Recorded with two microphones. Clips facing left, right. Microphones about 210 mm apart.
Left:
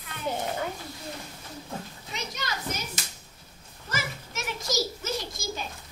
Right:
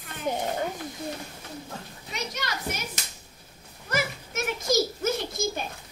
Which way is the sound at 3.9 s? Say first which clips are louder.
Right 5 dB; 55° right (ahead or behind).